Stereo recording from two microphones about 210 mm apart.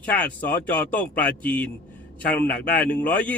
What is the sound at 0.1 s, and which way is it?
Speech, 5° left (ahead or behind).